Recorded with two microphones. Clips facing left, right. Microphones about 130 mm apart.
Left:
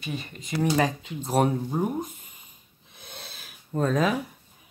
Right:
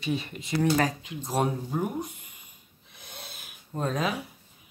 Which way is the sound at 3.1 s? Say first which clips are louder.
Left 1 dB; 25° left (ahead or behind).